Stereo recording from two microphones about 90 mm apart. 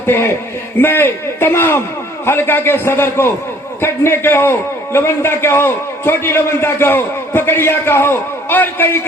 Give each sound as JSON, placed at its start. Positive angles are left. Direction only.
{"t": 0.8, "sound": "a man's voice", "side_deg": 25}